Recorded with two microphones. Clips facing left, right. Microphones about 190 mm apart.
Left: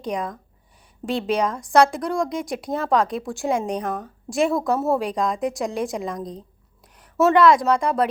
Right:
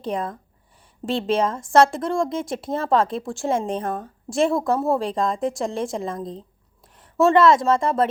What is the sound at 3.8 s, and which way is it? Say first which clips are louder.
Speech: even; 30° right (ahead or behind).